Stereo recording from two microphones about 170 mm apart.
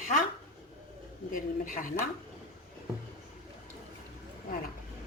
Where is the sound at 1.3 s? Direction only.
55° left (ahead or behind).